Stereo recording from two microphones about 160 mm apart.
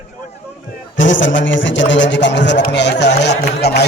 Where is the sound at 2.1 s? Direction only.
90° left.